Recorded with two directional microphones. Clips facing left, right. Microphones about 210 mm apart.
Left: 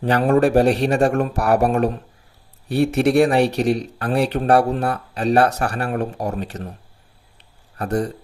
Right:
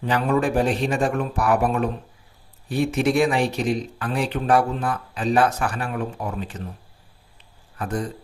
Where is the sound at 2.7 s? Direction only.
70° left (ahead or behind).